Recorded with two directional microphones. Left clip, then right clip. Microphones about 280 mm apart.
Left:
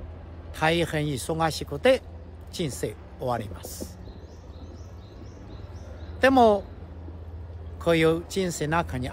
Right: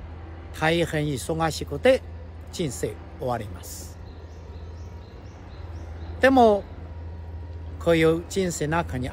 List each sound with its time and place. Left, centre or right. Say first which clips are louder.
0.6 s speech: right 1 dB; centre
6.2 s speech: right 1 dB; centre
7.8 s speech: right 2 dB; centre